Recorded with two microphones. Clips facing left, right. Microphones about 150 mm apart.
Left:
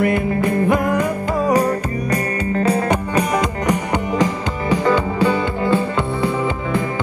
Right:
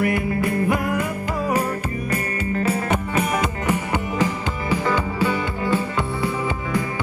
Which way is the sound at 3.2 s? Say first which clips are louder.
Left 4 dB; 35° left (ahead or behind).